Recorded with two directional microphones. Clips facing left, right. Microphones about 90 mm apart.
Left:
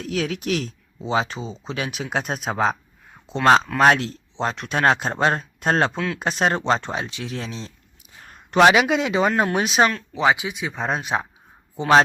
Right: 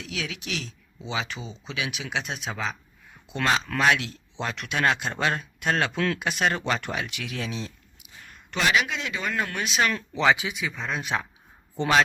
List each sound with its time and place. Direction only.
0.0 s speech: 45° left (ahead or behind)
4.7 s speech: 40° left (ahead or behind)
8.2 s a sound: 40° left (ahead or behind)
8.5 s a man's voice: 65° left (ahead or behind)
9.1 s speech: 25° left (ahead or behind)
9.4 s speech: 50° left (ahead or behind)
10.2 s speech: 20° left (ahead or behind)
10.8 s speech: 40° left (ahead or behind)
11.0 s speech: 25° left (ahead or behind)